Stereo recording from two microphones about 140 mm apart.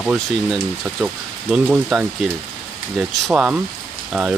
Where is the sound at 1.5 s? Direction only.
10° right (ahead or behind).